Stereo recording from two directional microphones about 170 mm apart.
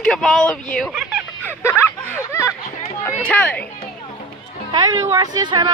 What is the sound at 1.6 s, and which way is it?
Speech, 15° left (ahead or behind).